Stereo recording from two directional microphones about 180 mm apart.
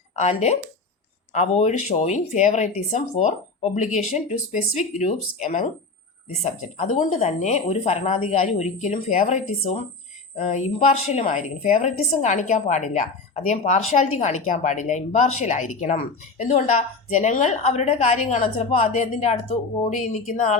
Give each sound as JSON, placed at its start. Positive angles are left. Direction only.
{"t": 0.2, "sound": "a woman's voice", "side_deg": 40}